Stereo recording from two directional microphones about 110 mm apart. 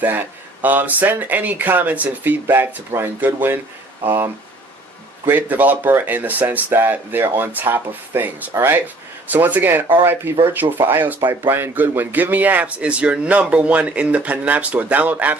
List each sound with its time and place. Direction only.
0.0 s a man's voice: 15° right (ahead or behind)